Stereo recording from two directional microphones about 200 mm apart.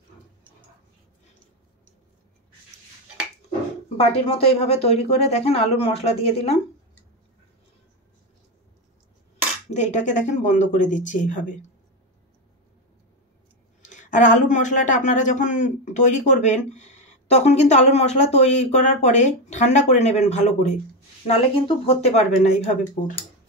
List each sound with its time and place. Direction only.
3.9 s speech: 30° left (ahead or behind)
9.7 s speech: 35° left (ahead or behind)
13.8 s speech: 40° left (ahead or behind)